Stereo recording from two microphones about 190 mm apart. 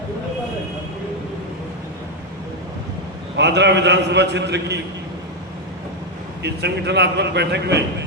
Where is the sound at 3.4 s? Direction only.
65° right (ahead or behind).